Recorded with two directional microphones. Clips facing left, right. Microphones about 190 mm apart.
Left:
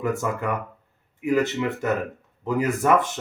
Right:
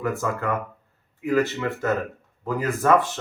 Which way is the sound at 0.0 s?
20° left (ahead or behind).